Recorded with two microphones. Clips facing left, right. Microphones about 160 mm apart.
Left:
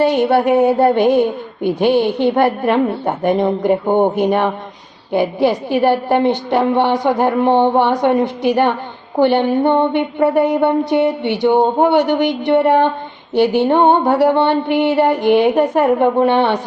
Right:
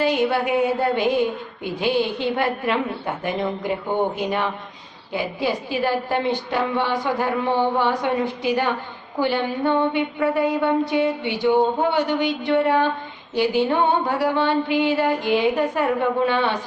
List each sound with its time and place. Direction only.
0.3 s a woman's voice: 60° left (ahead or behind)